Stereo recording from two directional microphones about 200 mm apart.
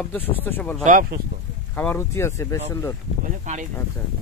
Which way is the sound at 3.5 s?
35° right (ahead or behind).